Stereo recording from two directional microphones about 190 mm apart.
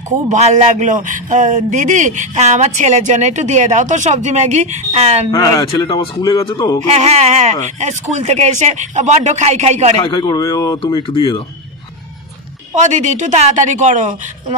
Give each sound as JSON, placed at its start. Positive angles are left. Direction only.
{"t": 0.3, "sound": "speech", "side_deg": -35}
{"t": 5.3, "sound": "speech", "side_deg": 20}
{"t": 6.9, "sound": "speech", "side_deg": -35}
{"t": 10.0, "sound": "speech", "side_deg": 25}
{"t": 12.7, "sound": "speech", "side_deg": -40}